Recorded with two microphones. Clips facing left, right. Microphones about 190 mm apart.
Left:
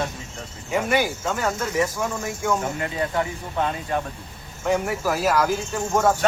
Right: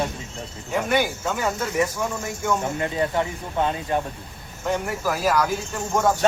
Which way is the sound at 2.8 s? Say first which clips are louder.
Right 2 dB; 25° right (ahead or behind).